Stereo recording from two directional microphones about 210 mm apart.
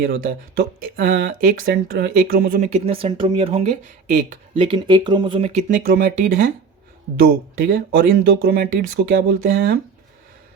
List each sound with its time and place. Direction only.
0.0 s speech: 45° right (ahead or behind)
2.6 s speech: 30° right (ahead or behind)
7.6 s speech: 45° right (ahead or behind)